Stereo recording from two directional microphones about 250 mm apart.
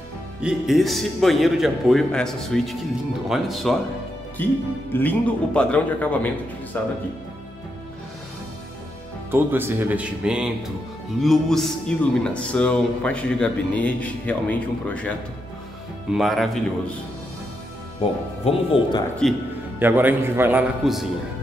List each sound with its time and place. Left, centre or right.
0.4 s a man's voice: centre
9.3 s a man's voice: centre
18.4 s speech: centre
19.8 s a man's voice: centre